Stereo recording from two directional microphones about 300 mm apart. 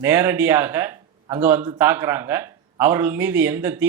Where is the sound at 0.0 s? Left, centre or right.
Centre.